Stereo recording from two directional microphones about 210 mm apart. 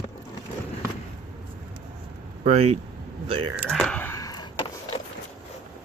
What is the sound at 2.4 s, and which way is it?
Speech, 30° right (ahead or behind).